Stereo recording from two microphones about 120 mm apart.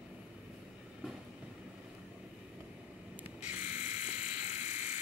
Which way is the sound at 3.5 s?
90° left.